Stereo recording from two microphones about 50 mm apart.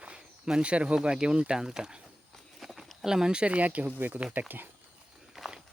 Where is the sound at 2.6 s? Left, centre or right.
Centre.